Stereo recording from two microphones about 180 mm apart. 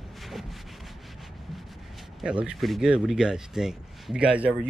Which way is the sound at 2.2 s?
5° right (ahead or behind).